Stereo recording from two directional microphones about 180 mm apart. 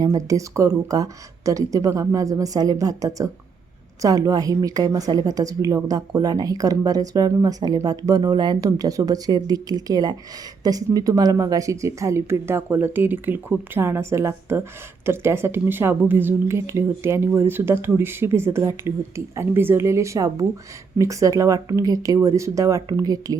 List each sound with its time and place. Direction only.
0.0 s a woman's voice: 20° right (ahead or behind)